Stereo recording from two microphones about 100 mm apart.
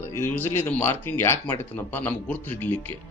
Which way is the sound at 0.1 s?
25° left (ahead or behind).